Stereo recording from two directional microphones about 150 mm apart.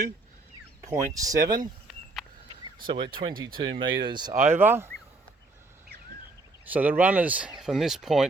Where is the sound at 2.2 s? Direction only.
Centre (ahead or behind).